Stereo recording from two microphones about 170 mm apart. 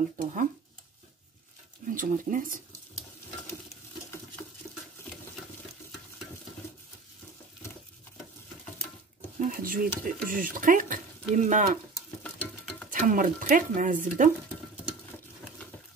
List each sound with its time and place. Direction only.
0.2 s speech: 50° right (ahead or behind)
1.9 s speech: 50° right (ahead or behind)
9.4 s a sound: 55° right (ahead or behind)
10.0 s speech: 55° right (ahead or behind)
12.2 s a sound: 5° left (ahead or behind)
12.9 s speech: 50° right (ahead or behind)